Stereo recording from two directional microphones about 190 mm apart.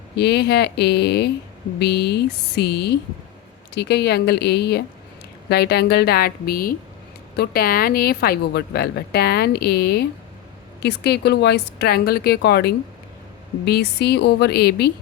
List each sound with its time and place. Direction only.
0.2 s a woman's voice: 60° left (ahead or behind)